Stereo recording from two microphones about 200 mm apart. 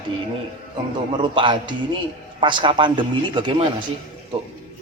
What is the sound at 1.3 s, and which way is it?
A man's voice, 25° right (ahead or behind).